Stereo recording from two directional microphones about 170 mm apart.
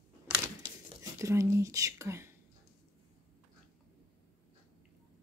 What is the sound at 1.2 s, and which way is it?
Speech, 15° right (ahead or behind).